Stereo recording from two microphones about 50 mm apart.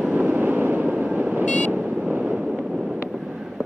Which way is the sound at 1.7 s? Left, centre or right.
Right.